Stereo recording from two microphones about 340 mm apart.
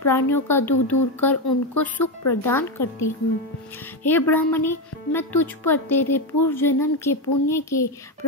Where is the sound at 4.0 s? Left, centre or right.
Centre.